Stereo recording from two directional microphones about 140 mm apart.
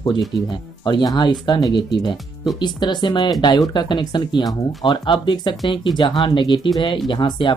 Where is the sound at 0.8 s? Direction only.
30° left (ahead or behind).